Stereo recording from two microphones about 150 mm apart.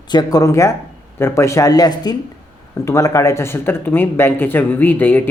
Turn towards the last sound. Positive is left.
turn(degrees=10)  # may be behind; listen again after turning